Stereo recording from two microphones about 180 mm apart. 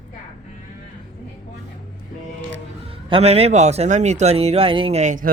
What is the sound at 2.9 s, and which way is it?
A man's voice, 35° right (ahead or behind).